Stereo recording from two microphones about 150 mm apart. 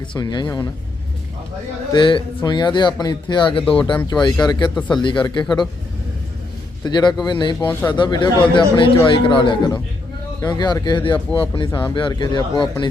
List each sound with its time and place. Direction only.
0.1 s speech: 30° left (ahead or behind)
1.9 s speech: 35° left (ahead or behind)
6.8 s speech: 30° left (ahead or behind)